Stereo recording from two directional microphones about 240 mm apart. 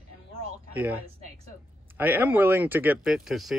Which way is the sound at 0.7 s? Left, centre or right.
Centre.